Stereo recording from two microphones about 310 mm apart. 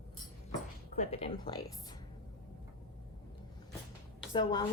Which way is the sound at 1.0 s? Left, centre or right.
Centre.